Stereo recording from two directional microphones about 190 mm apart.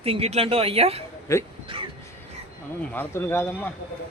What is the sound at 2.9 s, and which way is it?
Speech, 10° left (ahead or behind).